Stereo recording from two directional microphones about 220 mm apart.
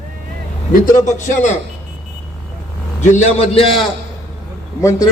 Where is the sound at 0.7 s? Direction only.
35° left (ahead or behind).